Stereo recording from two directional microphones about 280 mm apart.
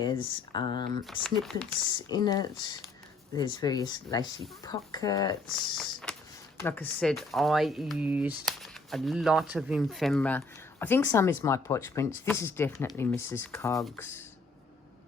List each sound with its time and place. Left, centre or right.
0.0 s speech: centre
1.0 s speech: centre
2.0 s speech: centre
5.5 s speech: centre